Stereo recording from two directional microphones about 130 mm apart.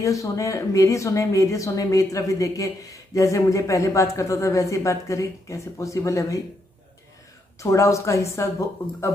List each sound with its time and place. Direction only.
0.0 s speech: 25° left (ahead or behind)
7.6 s speech: 25° left (ahead or behind)